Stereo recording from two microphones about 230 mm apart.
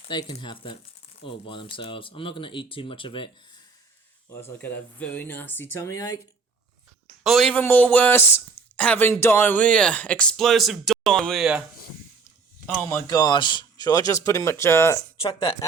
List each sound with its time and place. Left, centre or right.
0.1 s speech: centre
4.3 s speech: centre
7.3 s speech: centre
12.9 s speech: centre